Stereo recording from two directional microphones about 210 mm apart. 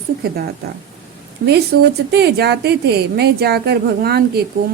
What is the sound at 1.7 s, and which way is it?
A woman's voice, 50° right (ahead or behind).